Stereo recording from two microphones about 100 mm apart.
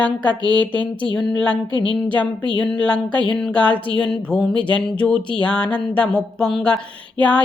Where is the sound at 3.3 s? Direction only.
5° left (ahead or behind).